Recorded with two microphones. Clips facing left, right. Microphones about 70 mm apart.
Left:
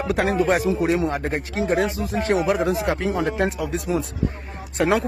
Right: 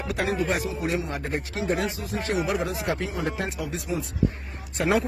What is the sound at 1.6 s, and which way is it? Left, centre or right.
Speech, left.